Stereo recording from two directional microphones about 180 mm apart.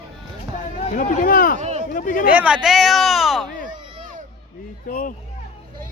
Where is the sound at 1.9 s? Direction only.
50° left (ahead or behind).